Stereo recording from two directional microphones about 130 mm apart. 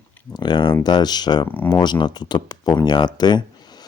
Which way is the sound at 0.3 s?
35° left (ahead or behind).